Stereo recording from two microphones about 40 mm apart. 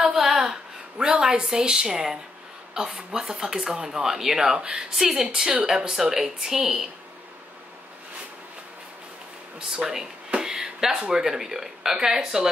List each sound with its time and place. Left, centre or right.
0.1 s a sound: centre
1.2 s a woman's voice: centre
4.6 s speech: right
5.7 s speech: centre
9.6 s a sound: centre
11.0 s speech: centre